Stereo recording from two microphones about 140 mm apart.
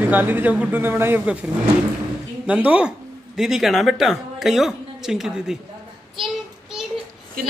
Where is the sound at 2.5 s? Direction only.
10° right (ahead or behind).